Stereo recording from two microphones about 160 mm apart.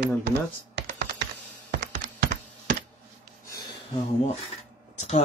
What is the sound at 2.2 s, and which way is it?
Computer keyboard, 70° right (ahead or behind).